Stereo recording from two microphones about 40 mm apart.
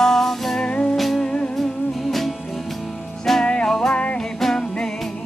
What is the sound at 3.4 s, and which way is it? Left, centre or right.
Music, left.